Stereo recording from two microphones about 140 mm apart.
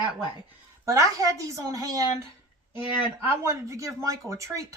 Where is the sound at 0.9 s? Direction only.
25° right (ahead or behind).